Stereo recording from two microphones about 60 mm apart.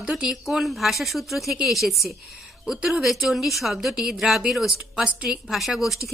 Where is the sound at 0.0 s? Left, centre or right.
Centre.